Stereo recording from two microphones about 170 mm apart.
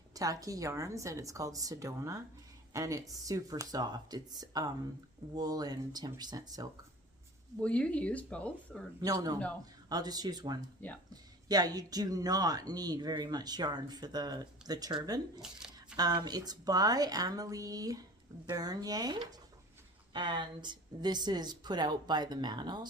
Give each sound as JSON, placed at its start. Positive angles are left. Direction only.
{"t": 0.1, "sound": "speech", "side_deg": -20}
{"t": 7.6, "sound": "speech", "side_deg": 5}
{"t": 9.0, "sound": "speech", "side_deg": -20}
{"t": 15.4, "sound": "a sound", "side_deg": -5}
{"t": 16.0, "sound": "speech", "side_deg": -25}